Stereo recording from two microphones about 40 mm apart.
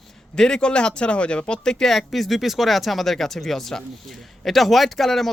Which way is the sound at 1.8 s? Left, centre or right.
Centre.